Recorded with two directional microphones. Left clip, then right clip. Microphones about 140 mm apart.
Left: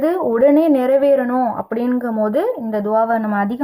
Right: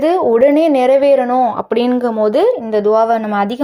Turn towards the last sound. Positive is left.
turn(degrees=-15)  # may be behind; listen again after turning